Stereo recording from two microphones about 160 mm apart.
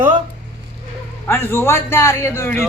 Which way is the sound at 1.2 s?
15° left (ahead or behind).